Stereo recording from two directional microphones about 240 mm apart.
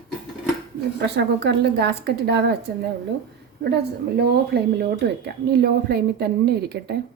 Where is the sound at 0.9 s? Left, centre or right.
Right.